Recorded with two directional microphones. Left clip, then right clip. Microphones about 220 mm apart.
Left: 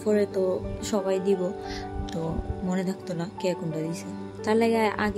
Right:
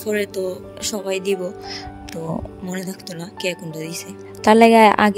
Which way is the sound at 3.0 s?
40° right (ahead or behind).